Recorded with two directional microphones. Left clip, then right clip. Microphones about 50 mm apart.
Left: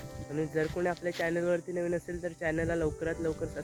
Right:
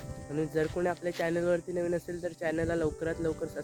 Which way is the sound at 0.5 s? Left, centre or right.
Right.